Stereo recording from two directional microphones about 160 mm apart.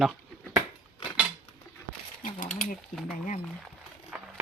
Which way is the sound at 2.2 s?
55° left (ahead or behind).